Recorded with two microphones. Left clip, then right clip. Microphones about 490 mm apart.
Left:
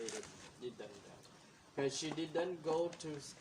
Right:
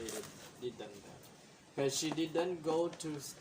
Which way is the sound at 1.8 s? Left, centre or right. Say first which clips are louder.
Right 4 dB; left.